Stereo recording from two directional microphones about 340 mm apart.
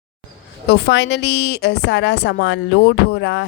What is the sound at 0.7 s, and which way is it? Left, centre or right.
A woman's voice, left.